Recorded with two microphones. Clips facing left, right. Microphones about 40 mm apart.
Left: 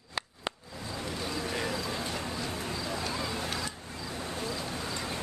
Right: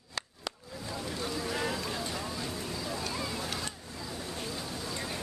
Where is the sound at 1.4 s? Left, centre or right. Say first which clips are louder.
Even; left.